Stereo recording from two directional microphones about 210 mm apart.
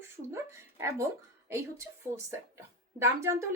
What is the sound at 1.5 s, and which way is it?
Speech, 15° right (ahead or behind).